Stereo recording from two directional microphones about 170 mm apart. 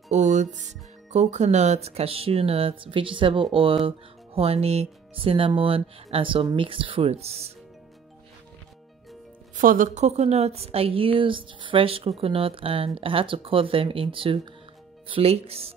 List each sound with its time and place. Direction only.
0.1 s a woman's voice: 45° right (ahead or behind)
9.6 s a woman's voice: 50° right (ahead or behind); by 15.7 s 35° right (ahead or behind)